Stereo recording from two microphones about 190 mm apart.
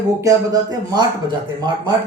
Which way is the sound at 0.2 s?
20° right (ahead or behind).